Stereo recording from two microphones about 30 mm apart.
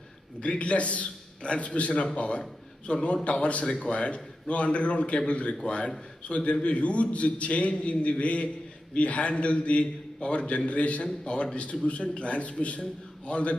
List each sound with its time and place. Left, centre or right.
0.4 s a man's voice: left